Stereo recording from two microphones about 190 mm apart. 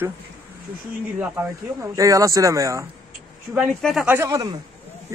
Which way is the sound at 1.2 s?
10° right (ahead or behind).